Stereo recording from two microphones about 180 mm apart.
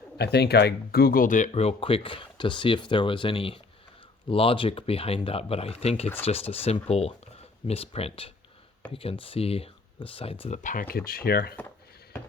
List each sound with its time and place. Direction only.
0.2 s speech: 65° left (ahead or behind)